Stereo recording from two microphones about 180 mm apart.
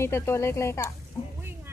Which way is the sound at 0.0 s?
15° left (ahead or behind).